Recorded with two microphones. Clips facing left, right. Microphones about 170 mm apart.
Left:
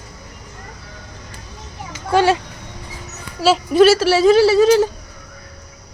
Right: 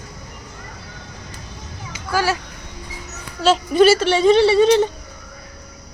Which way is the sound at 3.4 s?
5° left (ahead or behind).